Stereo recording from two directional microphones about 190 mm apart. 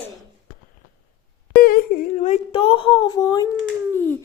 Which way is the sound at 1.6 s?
50° left (ahead or behind).